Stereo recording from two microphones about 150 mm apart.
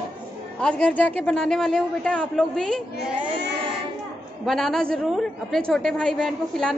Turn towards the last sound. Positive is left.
turn(degrees=0)  # may be behind; listen again after turning